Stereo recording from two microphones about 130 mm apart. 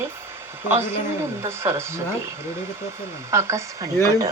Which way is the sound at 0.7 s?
20° right (ahead or behind).